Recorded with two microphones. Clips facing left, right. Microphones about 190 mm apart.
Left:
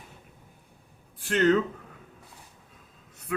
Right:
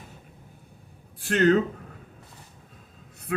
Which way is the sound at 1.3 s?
40° right (ahead or behind).